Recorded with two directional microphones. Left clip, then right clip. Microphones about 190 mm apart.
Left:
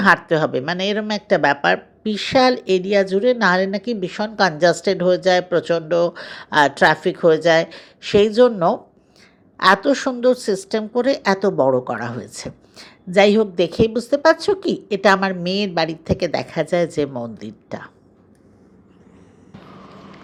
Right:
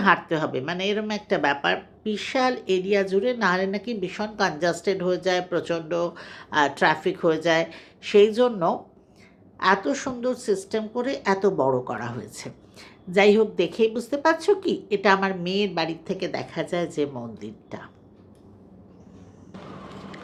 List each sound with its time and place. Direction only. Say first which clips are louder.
0.0 s speech: left 6 dB; 35° left (ahead or behind)